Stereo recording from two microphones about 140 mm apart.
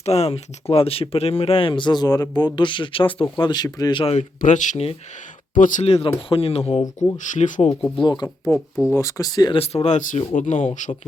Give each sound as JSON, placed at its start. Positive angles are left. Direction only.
{"t": 0.0, "sound": "speech", "side_deg": 50}
{"t": 4.0, "sound": "speech", "side_deg": 50}
{"t": 4.4, "sound": "speech", "side_deg": 65}
{"t": 5.8, "sound": "speech", "side_deg": 45}
{"t": 6.8, "sound": "speech", "side_deg": 25}
{"t": 7.2, "sound": "speech", "side_deg": 65}
{"t": 7.8, "sound": "speech", "side_deg": 10}
{"t": 8.0, "sound": "speech", "side_deg": 30}
{"t": 8.4, "sound": "speech", "side_deg": 5}
{"t": 8.9, "sound": "speech", "side_deg": 20}
{"t": 9.6, "sound": "speech", "side_deg": 50}